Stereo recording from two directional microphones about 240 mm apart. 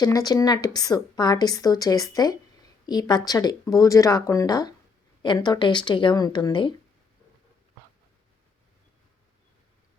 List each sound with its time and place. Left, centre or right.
0.0 s a woman's voice: centre